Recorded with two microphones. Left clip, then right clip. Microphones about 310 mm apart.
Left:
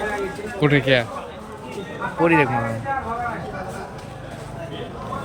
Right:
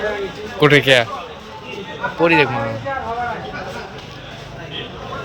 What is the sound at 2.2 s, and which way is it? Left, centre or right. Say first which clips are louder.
Speech: right 3 dB; centre.